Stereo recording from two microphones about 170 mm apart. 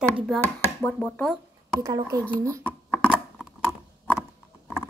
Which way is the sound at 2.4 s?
20° right (ahead or behind).